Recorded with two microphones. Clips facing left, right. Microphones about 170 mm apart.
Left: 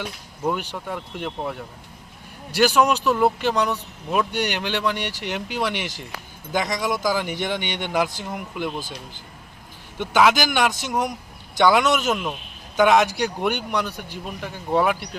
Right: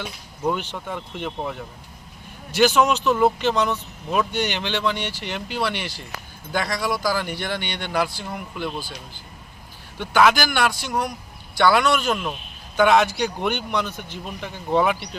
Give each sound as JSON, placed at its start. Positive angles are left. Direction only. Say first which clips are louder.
{"t": 0.0, "sound": "speech", "louder": "even", "side_deg": 10}
{"t": 10.0, "sound": "speech", "louder": "even", "side_deg": 15}